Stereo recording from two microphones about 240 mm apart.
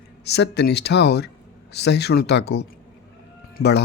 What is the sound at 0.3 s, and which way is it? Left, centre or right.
Speech, left.